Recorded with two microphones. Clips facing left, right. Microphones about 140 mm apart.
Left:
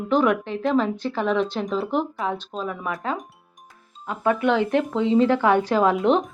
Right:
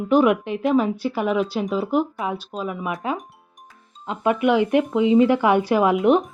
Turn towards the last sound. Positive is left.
turn(degrees=-10)  # may be behind; listen again after turning